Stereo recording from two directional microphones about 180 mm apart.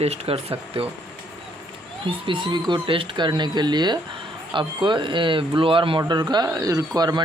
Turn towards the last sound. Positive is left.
turn(degrees=-20)  # may be behind; listen again after turning